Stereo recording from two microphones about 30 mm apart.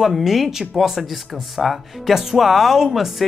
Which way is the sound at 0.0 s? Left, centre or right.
Centre.